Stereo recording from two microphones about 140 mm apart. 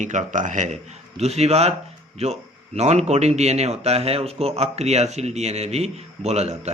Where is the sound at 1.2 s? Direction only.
50° right (ahead or behind).